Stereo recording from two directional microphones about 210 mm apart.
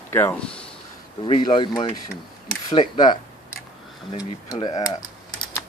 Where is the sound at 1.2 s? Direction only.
25° left (ahead or behind).